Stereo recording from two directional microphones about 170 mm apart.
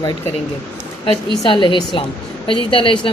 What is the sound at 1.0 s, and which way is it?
A woman's voice, 30° left (ahead or behind).